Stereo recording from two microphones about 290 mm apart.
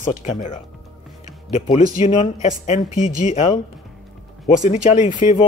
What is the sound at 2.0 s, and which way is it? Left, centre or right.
A man's voice, left.